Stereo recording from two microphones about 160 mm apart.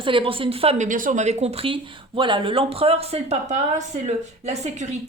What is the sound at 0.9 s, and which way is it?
Speech, 55° right (ahead or behind).